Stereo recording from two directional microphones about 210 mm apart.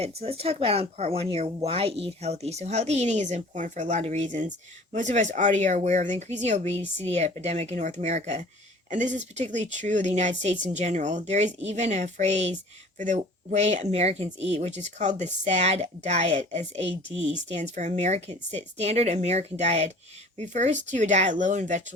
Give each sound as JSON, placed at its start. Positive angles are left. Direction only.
{"t": 0.0, "sound": "speech", "side_deg": -30}